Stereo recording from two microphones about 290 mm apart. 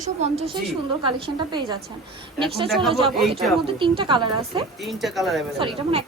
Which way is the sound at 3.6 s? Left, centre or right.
Centre.